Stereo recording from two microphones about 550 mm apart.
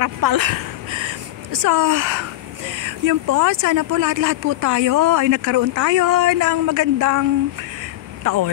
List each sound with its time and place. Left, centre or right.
0.0 s speech: right